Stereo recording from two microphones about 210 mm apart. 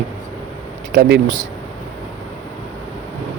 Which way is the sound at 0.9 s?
55° right (ahead or behind).